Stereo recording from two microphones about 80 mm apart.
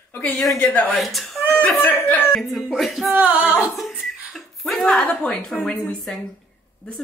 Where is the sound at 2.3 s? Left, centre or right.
Centre.